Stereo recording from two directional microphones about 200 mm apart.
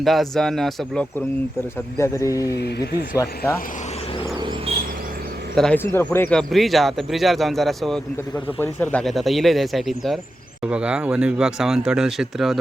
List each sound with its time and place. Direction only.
0.0 s speech: centre (ahead or behind)
2.0 s speech: 15° left (ahead or behind)
2.6 s speech: 55° left (ahead or behind)
5.5 s speech: 5° left (ahead or behind)